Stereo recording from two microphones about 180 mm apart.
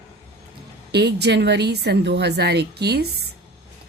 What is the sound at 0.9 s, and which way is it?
A woman's voice, 65° right (ahead or behind).